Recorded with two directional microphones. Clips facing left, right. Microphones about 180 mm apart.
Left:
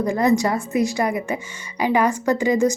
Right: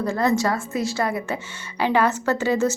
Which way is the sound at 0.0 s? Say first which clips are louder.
Left 3 dB; 15° left (ahead or behind).